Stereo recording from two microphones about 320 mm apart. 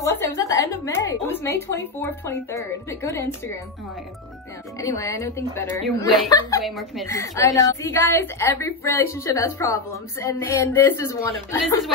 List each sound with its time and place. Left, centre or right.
0.0 s a sound: centre
1.7 s a woman's voice: centre
4.7 s a woman's voice: centre